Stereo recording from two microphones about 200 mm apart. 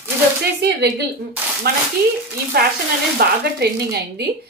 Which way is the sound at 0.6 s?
60° right (ahead or behind).